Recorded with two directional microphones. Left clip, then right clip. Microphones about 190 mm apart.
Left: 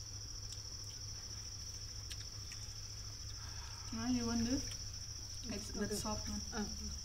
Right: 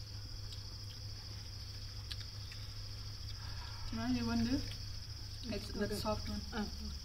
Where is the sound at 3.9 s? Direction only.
5° right (ahead or behind).